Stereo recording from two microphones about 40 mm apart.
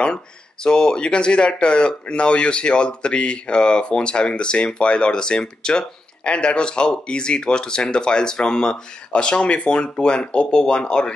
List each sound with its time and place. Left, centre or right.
0.7 s speech: left